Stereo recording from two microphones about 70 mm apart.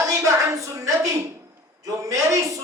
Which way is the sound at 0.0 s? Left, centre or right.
Right.